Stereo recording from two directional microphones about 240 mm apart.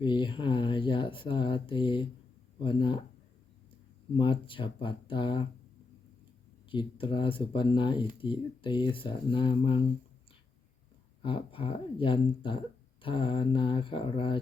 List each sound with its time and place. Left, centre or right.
0.0 s speech: centre
4.2 s speech: left
6.7 s speech: left
11.2 s speech: left